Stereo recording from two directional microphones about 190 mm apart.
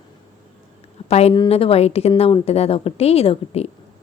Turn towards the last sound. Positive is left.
turn(degrees=30)  # may be behind; listen again after turning